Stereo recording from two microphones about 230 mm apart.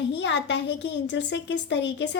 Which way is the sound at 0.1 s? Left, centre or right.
Left.